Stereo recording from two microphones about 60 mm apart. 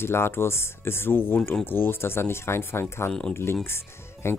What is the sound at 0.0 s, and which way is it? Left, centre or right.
Speech, left.